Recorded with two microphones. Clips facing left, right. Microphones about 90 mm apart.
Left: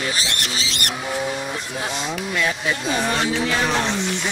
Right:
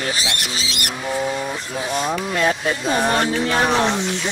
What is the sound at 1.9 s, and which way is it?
Speech, 45° right (ahead or behind).